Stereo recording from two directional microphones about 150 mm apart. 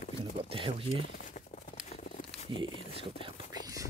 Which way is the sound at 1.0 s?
55° left (ahead or behind).